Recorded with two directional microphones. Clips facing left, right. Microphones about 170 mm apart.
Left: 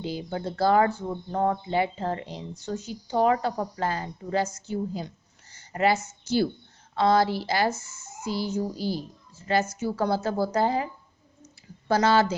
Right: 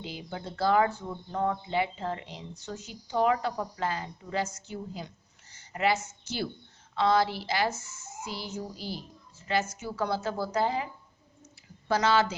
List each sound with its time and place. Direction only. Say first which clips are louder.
0.0 s speech: left 7 dB; 40° left (ahead or behind)
11.9 s speech: left 4 dB; 40° left (ahead or behind)